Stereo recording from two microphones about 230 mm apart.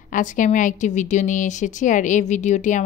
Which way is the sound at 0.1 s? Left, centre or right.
Left.